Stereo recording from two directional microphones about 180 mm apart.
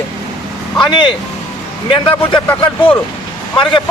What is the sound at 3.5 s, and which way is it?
Speech, 25° left (ahead or behind).